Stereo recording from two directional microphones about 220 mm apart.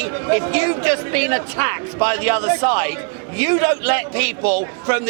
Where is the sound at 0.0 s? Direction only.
15° right (ahead or behind).